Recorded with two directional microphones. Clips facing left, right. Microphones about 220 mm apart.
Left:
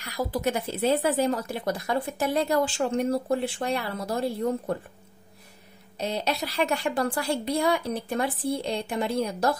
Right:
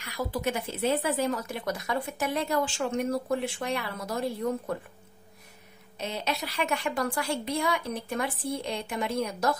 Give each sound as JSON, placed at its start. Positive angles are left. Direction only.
{"t": 0.3, "sound": "speech", "side_deg": 40}
{"t": 5.9, "sound": "speech", "side_deg": 35}